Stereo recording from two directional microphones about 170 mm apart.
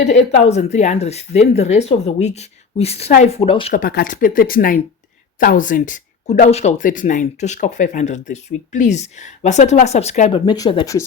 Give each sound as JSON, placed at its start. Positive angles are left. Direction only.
{"t": 0.0, "sound": "a woman's voice", "side_deg": 40}
{"t": 3.7, "sound": "speech", "side_deg": 60}
{"t": 10.4, "sound": "speech", "side_deg": 25}